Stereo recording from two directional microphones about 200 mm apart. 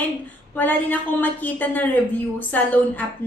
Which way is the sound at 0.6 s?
10° left (ahead or behind).